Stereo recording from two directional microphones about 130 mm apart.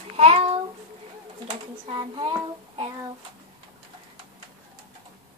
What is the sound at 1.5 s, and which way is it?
Speech, 40° right (ahead or behind).